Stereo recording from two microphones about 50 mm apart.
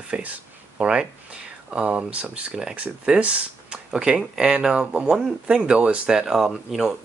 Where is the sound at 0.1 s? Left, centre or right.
Right.